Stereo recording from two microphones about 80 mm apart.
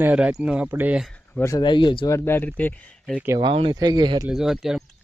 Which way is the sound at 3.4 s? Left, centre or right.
Right.